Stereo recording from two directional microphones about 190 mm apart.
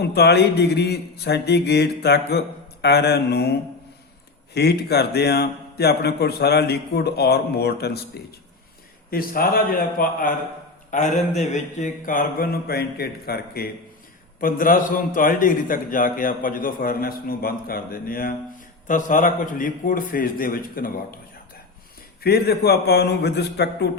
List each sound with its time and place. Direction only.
0.0 s a man's voice: 60° left (ahead or behind)
4.5 s a man's voice: 60° left (ahead or behind)
9.0 s a man's voice: 50° left (ahead or behind)
22.2 s a man's voice: 55° left (ahead or behind)